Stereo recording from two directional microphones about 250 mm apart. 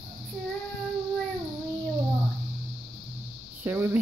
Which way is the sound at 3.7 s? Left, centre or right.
Centre.